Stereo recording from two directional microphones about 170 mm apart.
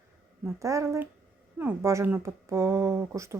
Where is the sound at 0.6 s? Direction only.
20° right (ahead or behind).